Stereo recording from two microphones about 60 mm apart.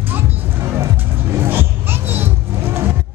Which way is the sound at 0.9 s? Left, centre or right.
Right.